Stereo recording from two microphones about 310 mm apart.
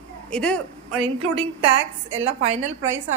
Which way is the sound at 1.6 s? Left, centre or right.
Right.